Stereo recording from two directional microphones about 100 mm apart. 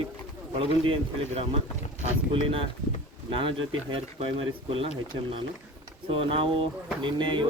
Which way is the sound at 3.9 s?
65° right (ahead or behind).